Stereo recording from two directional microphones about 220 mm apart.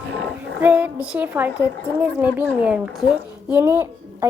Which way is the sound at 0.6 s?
5° right (ahead or behind).